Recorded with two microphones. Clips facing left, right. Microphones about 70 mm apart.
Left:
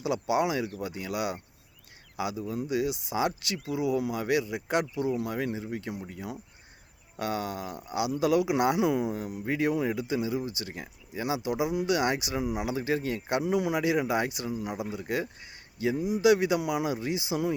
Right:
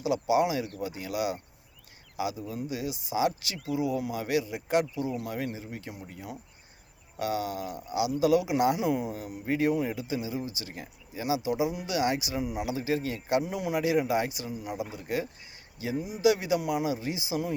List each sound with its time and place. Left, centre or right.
0.0 s speech: left
5.2 s speech: left
5.5 s speech: left
7.2 s speech: left
9.1 s speech: left
9.6 s speech: left
11.4 s speech: left
12.6 s speech: left
13.2 s speech: left
14.6 s speech: left
14.9 s speech: left
16.3 s speech: left